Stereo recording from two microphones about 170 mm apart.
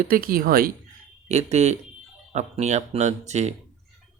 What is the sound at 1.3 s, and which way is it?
Speech, 40° right (ahead or behind).